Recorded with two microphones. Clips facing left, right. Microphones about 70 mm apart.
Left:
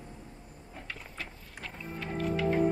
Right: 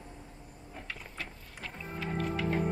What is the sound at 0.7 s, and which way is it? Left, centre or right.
Music, centre.